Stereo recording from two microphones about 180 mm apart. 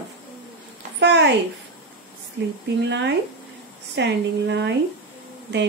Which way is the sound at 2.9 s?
75° right (ahead or behind).